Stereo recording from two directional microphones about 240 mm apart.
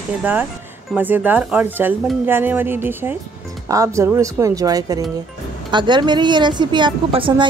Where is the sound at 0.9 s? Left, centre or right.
Centre.